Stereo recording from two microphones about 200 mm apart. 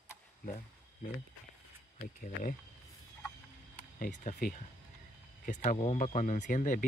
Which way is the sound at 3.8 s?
40° left (ahead or behind).